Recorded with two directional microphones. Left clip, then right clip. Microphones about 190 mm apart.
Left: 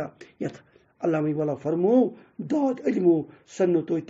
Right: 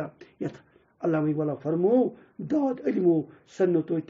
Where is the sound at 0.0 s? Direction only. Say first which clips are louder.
Left 2 dB; 30° left (ahead or behind).